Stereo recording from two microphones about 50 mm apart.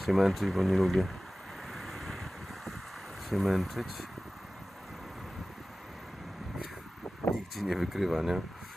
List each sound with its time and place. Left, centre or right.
0.0 s speech: centre
1.7 s vehicle: centre
3.2 s speech: centre
7.5 s speech: centre